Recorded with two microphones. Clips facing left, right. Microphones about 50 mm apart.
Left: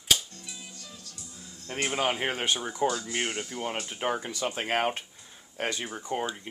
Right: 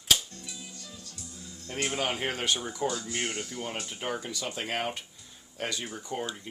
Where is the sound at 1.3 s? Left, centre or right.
Left.